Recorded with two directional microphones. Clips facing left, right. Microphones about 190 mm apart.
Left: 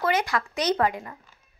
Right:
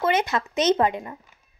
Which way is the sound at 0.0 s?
20° right (ahead or behind).